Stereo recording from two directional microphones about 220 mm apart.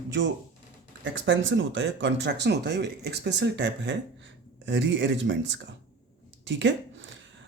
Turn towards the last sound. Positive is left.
turn(degrees=-55)  # may be behind; listen again after turning